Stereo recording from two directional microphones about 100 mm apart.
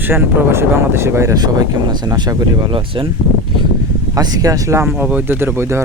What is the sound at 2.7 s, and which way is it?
Speech, 60° right (ahead or behind).